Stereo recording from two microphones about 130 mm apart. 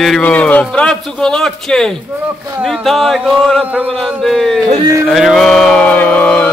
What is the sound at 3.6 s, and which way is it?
Speech, 10° right (ahead or behind).